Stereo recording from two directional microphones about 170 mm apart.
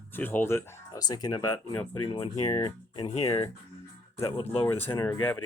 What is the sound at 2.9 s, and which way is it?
Speech, 35° left (ahead or behind).